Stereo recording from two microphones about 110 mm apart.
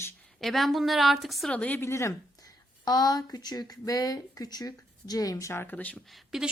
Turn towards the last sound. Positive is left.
turn(degrees=-5)  # may be behind; listen again after turning